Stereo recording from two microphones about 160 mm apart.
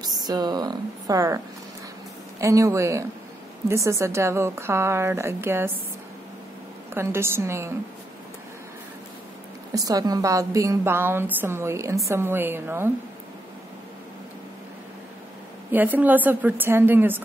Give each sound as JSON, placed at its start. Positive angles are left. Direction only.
{"t": 0.0, "sound": "a woman's voice", "side_deg": -25}
{"t": 2.4, "sound": "a woman's voice", "side_deg": -20}
{"t": 6.9, "sound": "a woman's voice", "side_deg": -15}
{"t": 9.8, "sound": "a woman's voice", "side_deg": -25}
{"t": 15.7, "sound": "a woman's voice", "side_deg": -10}